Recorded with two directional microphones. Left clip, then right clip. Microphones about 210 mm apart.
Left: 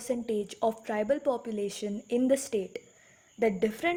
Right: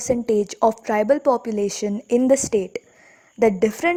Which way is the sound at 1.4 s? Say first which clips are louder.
Right 10 dB; 35° right (ahead or behind).